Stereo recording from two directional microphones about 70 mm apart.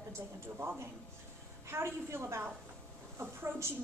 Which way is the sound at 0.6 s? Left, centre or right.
Right.